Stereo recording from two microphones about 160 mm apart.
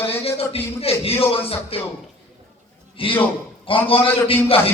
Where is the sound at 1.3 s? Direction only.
35° left (ahead or behind).